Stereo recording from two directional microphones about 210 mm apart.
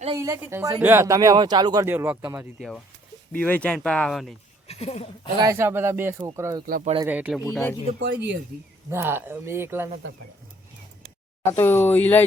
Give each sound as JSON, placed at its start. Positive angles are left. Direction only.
{"t": 0.2, "sound": "speech", "side_deg": -15}
{"t": 2.6, "sound": "speech", "side_deg": 0}
{"t": 4.7, "sound": "speech", "side_deg": 30}
{"t": 5.4, "sound": "speech", "side_deg": -15}
{"t": 6.7, "sound": "speech", "side_deg": -40}
{"t": 7.1, "sound": "speech", "side_deg": -5}
{"t": 8.0, "sound": "speech", "side_deg": -55}
{"t": 8.9, "sound": "speech", "side_deg": -10}
{"t": 11.5, "sound": "speech", "side_deg": 10}